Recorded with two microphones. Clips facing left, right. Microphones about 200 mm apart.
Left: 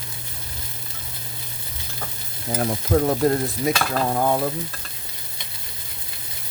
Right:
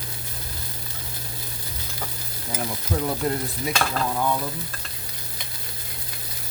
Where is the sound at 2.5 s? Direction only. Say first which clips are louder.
Left 7 dB; 55° left (ahead or behind).